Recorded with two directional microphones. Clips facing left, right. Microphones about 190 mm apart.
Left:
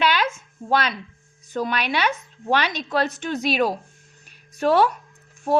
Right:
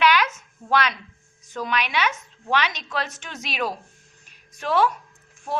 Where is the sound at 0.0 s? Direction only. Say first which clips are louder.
Right 1 dB; 30° left (ahead or behind).